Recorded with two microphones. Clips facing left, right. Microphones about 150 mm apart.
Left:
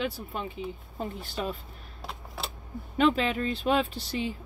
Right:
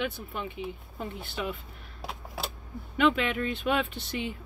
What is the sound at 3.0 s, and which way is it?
Speech, 35° left (ahead or behind).